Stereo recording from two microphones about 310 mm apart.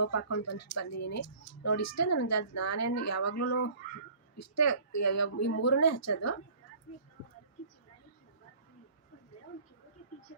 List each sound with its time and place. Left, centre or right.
0.0 s speech: left